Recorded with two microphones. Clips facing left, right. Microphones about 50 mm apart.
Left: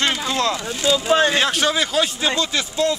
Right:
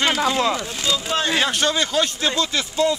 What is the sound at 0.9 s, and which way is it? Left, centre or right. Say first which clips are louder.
Speech: left 6 dB; centre.